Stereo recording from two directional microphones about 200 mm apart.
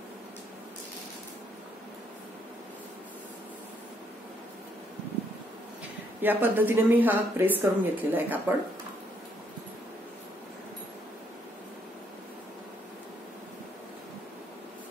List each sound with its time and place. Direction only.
6.2 s speech: 10° right (ahead or behind)